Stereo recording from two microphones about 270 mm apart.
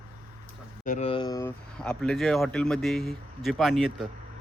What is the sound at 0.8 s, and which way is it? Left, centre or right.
Speech, left.